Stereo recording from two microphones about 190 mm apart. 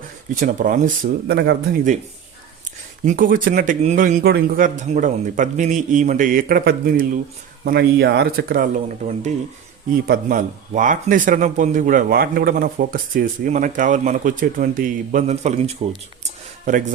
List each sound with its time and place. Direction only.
0.3 s speech: 45° right (ahead or behind)
3.1 s speech: 45° right (ahead or behind)